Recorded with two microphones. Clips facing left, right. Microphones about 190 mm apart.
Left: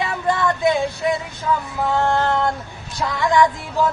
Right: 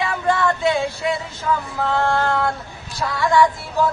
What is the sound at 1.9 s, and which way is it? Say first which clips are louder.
Music: left 1 dB; 15° left (ahead or behind).